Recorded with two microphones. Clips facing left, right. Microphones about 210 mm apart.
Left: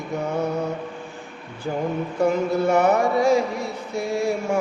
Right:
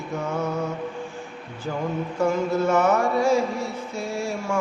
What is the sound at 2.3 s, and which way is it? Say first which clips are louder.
Music: left 1 dB; 15° left (ahead or behind).